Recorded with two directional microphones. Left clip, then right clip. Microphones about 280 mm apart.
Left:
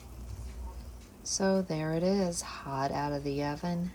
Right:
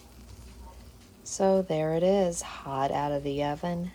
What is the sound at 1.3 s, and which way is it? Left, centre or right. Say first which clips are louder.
Speech: right 6 dB; right.